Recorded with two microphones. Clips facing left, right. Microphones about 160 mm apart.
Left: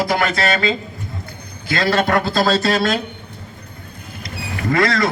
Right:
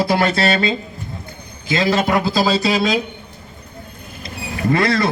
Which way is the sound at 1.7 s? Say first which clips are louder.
Right 1 dB; 15° right (ahead or behind).